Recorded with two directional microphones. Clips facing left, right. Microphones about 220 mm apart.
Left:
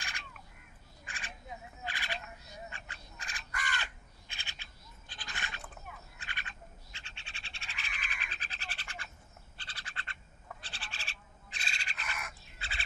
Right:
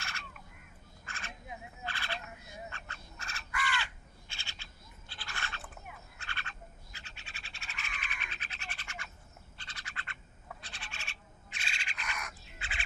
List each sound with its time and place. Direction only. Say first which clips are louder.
1.0 s crow: right 1 dB; 15° left (ahead or behind)
1.9 s frog: right 1 dB; 15° left (ahead or behind)
3.5 s crow: right 4 dB; 45° left (ahead or behind)
3.8 s crow: even; 15° left (ahead or behind)
6.1 s frog: right 2 dB; 15° left (ahead or behind)
6.9 s a sound: right 1 dB; 30° left (ahead or behind)
9.6 s bird: even; 30° left (ahead or behind)
10.6 s owl: even; 30° left (ahead or behind)
12.5 s fowl: right 1 dB; 35° left (ahead or behind)